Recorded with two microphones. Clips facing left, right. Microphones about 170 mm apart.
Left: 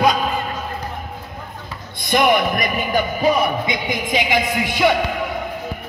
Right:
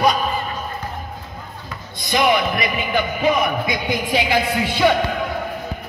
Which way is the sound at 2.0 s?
50° left (ahead or behind).